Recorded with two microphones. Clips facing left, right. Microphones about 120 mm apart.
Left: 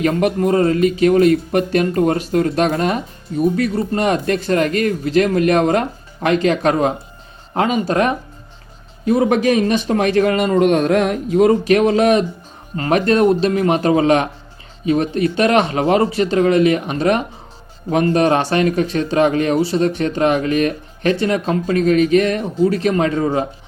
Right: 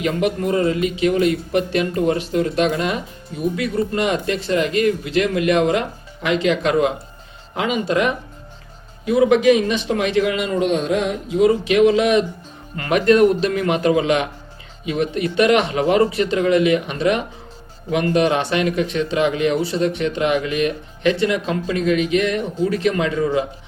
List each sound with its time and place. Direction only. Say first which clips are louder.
0.0 s speech: left 4 dB; 45° left (ahead or behind)